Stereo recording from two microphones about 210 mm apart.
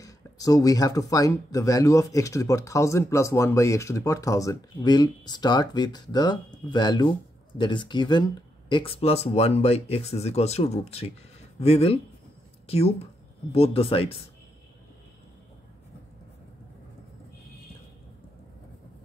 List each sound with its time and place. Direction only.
0.0 s speech: 15° left (ahead or behind)